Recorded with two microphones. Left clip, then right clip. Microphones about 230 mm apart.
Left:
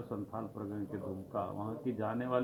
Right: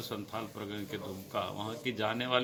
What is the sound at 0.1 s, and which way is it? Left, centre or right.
Speech, centre.